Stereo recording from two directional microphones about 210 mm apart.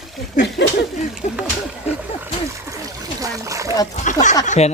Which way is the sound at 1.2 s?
35° left (ahead or behind).